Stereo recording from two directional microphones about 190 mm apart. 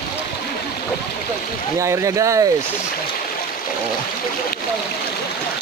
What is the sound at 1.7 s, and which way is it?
Speech, 15° right (ahead or behind).